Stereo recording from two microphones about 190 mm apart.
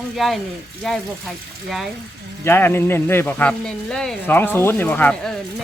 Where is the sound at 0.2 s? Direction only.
Centre (ahead or behind).